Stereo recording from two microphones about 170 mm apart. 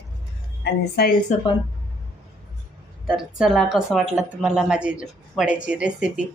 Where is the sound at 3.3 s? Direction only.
Centre (ahead or behind).